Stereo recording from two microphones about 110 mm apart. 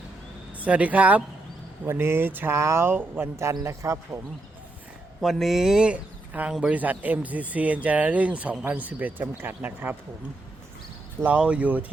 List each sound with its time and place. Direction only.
0.6 s speech: 15° right (ahead or behind)
5.2 s speech: centre (ahead or behind)
11.2 s speech: 10° right (ahead or behind)